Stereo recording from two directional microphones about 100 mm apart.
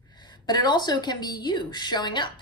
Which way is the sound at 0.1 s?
45° left (ahead or behind).